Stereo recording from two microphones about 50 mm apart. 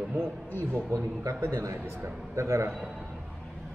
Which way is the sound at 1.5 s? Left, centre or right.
Right.